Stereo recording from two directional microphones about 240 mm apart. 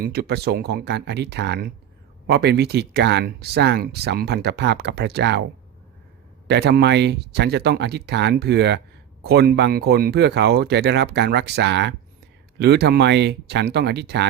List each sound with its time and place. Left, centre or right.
0.0 s speech: right
6.5 s speech: right